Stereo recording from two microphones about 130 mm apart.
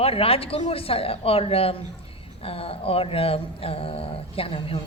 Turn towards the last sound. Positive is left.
turn(degrees=45)  # may be behind; listen again after turning